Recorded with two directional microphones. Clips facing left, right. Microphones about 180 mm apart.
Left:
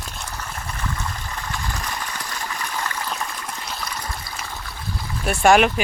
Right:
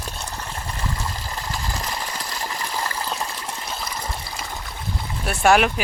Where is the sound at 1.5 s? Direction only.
30° right (ahead or behind).